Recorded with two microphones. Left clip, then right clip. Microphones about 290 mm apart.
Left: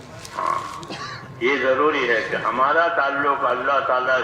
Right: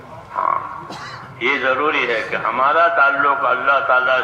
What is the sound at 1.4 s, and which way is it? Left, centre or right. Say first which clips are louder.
A man's voice: right 1 dB; right.